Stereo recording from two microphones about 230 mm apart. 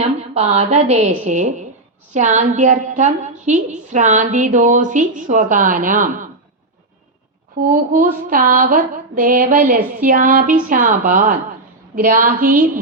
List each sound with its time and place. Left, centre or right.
0.0 s a woman's voice: right
7.7 s a woman's voice: right